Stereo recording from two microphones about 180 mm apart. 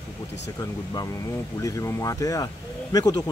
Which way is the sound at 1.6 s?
20° left (ahead or behind).